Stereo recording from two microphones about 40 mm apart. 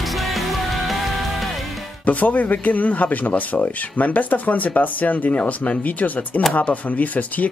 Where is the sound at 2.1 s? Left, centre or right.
Left.